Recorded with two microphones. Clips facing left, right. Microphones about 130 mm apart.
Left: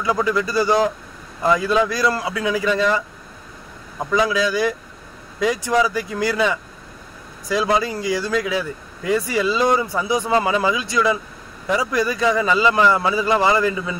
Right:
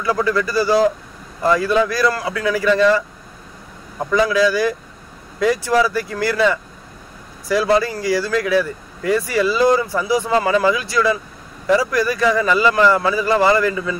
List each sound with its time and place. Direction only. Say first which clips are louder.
0.0 s speech: right 1 dB; 20° left (ahead or behind)
4.1 s speech: right 3 dB; 20° left (ahead or behind)